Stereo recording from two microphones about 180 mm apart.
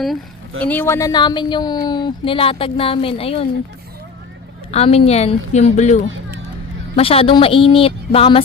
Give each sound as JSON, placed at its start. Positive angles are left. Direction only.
{"t": 0.6, "sound": "speech", "side_deg": 10}
{"t": 4.7, "sound": "a woman's voice", "side_deg": 35}